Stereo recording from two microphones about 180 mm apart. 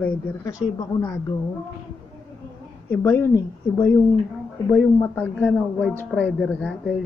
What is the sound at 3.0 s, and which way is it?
Speech, 10° left (ahead or behind).